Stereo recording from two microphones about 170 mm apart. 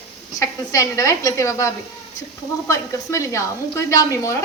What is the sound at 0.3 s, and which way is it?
A woman's voice, 20° left (ahead or behind).